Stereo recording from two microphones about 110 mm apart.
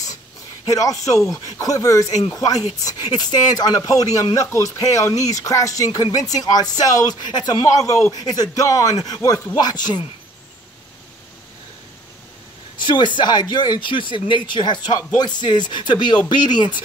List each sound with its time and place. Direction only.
0.7 s speech: 30° left (ahead or behind)
12.7 s speech: 45° left (ahead or behind)